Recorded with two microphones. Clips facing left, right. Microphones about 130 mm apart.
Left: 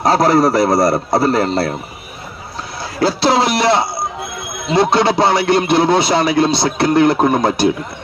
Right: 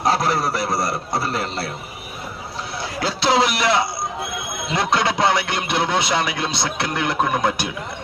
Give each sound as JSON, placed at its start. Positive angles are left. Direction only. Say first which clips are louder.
{"t": 0.0, "sound": "speech", "louder": "left 8 dB", "side_deg": 40}
{"t": 3.0, "sound": "speech", "louder": "left 5 dB", "side_deg": 35}